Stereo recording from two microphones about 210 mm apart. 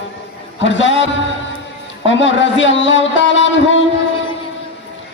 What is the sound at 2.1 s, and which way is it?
A man's voice, 60° left (ahead or behind).